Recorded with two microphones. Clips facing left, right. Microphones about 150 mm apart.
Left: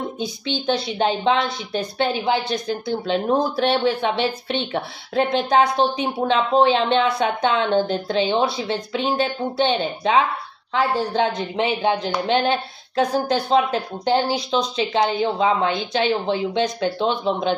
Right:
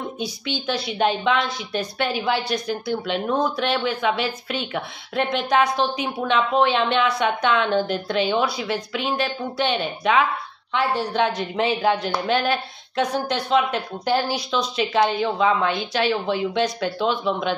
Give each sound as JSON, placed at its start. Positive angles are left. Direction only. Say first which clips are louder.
{"t": 0.9, "sound": "speech", "louder": "even", "side_deg": 30}